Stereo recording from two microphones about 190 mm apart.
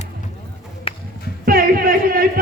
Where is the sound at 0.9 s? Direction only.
30° left (ahead or behind).